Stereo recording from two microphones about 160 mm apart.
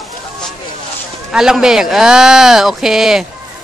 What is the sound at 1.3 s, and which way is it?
Speech, 5° right (ahead or behind).